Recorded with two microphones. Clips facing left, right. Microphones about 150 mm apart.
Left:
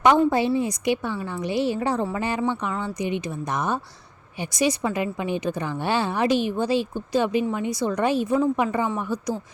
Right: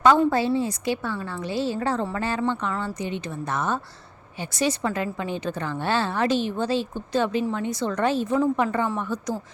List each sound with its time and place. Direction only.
0.0 s a woman's voice: 15° left (ahead or behind)